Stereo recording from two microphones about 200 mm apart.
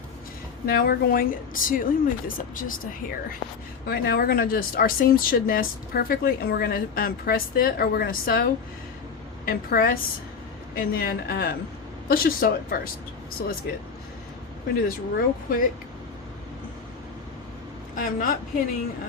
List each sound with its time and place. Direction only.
0.6 s speech: 50° left (ahead or behind)
3.8 s speech: 50° left (ahead or behind)
9.5 s speech: 45° left (ahead or behind)
14.8 s speech: 45° left (ahead or behind)
17.9 s a woman's voice: 45° left (ahead or behind)